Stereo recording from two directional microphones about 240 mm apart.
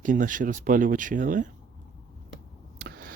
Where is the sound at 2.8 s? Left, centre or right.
Right.